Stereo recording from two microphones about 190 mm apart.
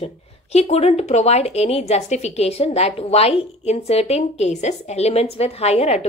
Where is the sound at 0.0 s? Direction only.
35° left (ahead or behind).